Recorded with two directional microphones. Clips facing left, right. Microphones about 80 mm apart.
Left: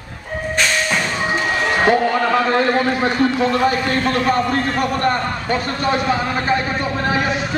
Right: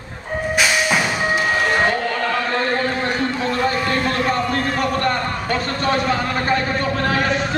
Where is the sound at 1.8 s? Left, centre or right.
Centre.